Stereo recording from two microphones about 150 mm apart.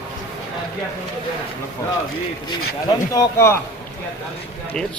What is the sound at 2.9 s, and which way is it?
Speech, 20° left (ahead or behind).